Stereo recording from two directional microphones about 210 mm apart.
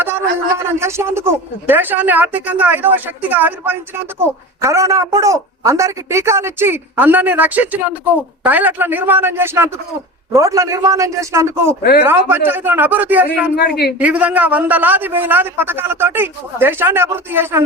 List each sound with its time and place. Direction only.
0.0 s speech: 10° right (ahead or behind)
13.6 s a woman's voice: 50° left (ahead or behind)
14.0 s speech: 5° right (ahead or behind)